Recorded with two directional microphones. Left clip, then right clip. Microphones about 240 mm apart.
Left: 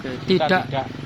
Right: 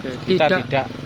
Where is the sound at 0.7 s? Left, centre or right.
Right.